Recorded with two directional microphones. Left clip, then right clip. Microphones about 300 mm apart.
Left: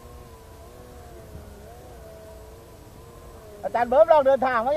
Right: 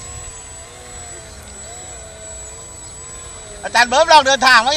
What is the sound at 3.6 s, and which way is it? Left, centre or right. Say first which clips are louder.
Speech: right 5 dB; left.